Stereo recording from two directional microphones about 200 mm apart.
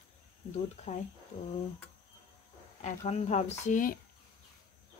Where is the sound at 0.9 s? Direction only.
35° left (ahead or behind).